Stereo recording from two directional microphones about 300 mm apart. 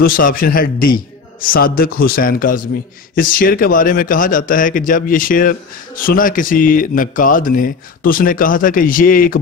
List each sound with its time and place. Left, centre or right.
0.0 s speech: left